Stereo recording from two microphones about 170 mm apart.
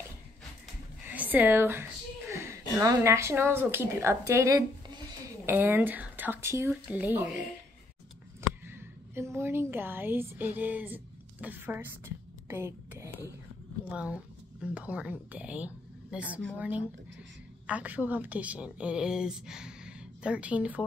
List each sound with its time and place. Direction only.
1.0 s a woman's voice: 10° right (ahead or behind)
8.4 s a woman's voice: 15° right (ahead or behind)
12.4 s a sound: 10° right (ahead or behind)
13.8 s a woman's voice: 5° right (ahead or behind)